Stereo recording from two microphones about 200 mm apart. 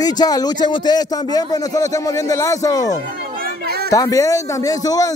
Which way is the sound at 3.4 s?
50° right (ahead or behind).